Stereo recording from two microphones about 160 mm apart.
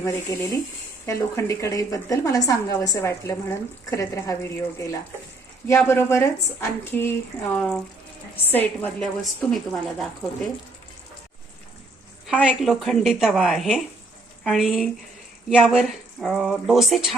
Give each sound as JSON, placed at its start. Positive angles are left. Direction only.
{"t": 0.0, "sound": "a woman's voice", "side_deg": 20}
{"t": 12.3, "sound": "speech", "side_deg": -5}